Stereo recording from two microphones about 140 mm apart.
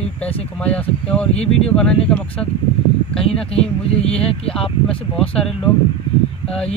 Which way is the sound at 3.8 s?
45° left (ahead or behind).